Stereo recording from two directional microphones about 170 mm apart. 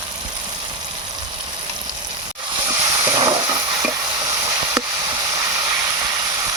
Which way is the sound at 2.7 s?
20° right (ahead or behind).